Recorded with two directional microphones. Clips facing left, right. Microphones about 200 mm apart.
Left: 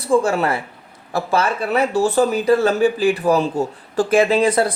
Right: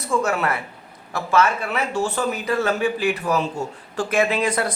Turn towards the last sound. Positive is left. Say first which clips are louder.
# left 5 dB
turn(degrees=30)  # may be behind; listen again after turning